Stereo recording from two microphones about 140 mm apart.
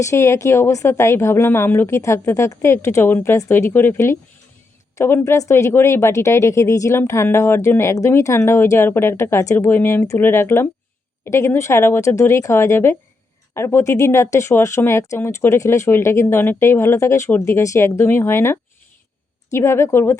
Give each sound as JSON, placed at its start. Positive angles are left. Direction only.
{"t": 0.0, "sound": "speech", "side_deg": 20}